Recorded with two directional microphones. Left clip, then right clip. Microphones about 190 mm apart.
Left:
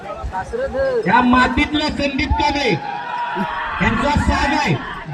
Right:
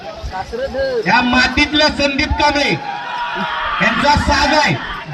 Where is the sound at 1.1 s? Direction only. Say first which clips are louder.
Right 1 dB; 35° right (ahead or behind).